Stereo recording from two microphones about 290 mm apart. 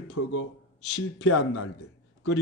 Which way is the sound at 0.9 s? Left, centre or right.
Left.